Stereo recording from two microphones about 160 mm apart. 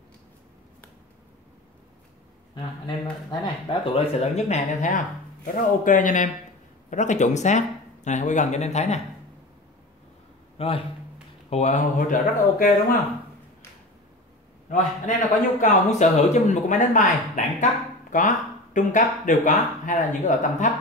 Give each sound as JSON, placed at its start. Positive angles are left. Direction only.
{"t": 3.3, "sound": "a man's voice", "side_deg": 30}
{"t": 10.6, "sound": "a man's voice", "side_deg": 40}
{"t": 14.7, "sound": "a man's voice", "side_deg": 55}